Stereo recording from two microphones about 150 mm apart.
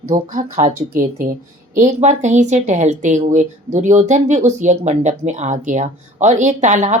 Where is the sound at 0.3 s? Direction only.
60° right (ahead or behind).